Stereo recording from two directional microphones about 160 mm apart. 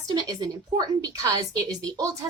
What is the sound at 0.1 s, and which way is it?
A woman's voice, 25° right (ahead or behind).